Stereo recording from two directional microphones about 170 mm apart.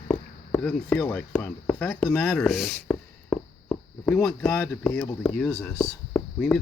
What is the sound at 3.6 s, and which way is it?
Speech, 5° left (ahead or behind).